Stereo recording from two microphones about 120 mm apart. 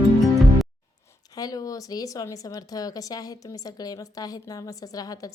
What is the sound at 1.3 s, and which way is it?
A woman's voice, 30° left (ahead or behind).